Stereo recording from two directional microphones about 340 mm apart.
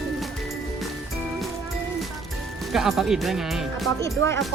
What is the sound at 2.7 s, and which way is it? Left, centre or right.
Speech, centre.